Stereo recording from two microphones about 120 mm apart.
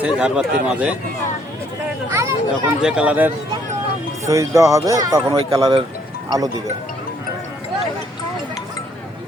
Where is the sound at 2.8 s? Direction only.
5° right (ahead or behind).